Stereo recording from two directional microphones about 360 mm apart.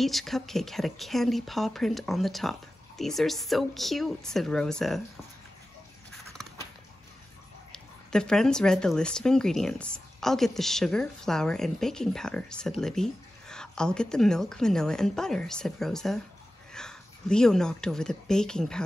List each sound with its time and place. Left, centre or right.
0.0 s speech: centre
7.7 s speech: centre